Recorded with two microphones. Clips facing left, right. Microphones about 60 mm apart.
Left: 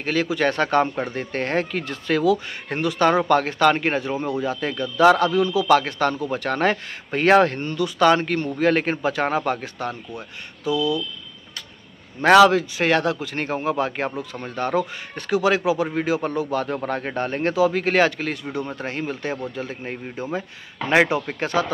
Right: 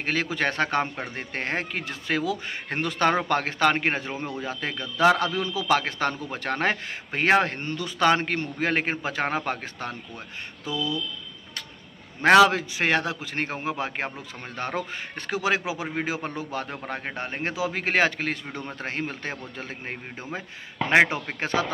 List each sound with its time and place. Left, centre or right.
0.0 s a man's voice: right
2.8 s a man's voice: right
12.2 s a man's voice: right